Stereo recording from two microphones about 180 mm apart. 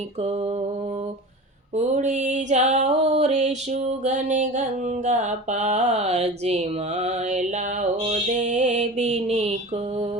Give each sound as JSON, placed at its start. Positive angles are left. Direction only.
{"t": 0.2, "sound": "music", "side_deg": -35}
{"t": 1.7, "sound": "music", "side_deg": -40}